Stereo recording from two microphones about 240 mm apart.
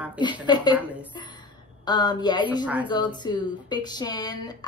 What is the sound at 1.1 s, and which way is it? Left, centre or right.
A woman's voice, centre.